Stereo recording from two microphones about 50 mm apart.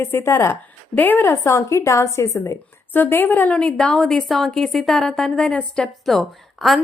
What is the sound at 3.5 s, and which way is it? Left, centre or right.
A woman's voice, centre.